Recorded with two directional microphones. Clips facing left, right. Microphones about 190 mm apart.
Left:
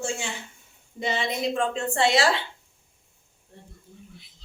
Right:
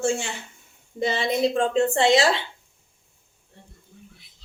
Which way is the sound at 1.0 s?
35° right (ahead or behind).